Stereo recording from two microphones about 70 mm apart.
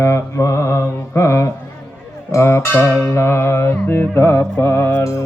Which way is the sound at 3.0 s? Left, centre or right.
Left.